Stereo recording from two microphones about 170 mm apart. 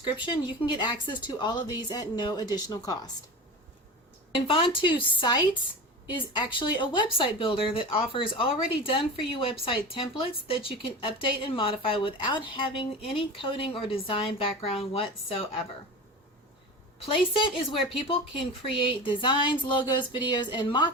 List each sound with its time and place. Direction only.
0.0 s a woman's voice: 25° left (ahead or behind)
4.4 s a woman's voice: 30° left (ahead or behind)
17.1 s a woman's voice: 30° left (ahead or behind)